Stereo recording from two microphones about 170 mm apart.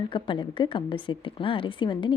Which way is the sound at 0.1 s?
30° left (ahead or behind).